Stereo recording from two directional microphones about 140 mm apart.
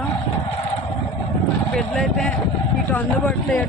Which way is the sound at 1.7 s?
5° left (ahead or behind).